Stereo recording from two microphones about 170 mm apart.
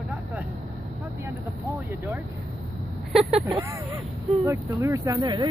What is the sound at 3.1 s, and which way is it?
Speech, centre (ahead or behind).